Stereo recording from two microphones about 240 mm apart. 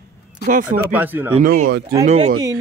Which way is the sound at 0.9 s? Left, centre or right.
Centre.